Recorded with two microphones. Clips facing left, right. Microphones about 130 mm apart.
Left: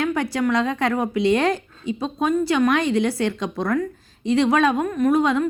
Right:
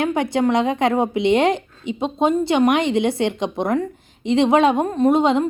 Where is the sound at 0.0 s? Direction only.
20° right (ahead or behind).